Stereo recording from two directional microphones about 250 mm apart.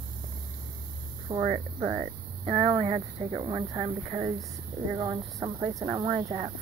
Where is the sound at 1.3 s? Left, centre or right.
Right.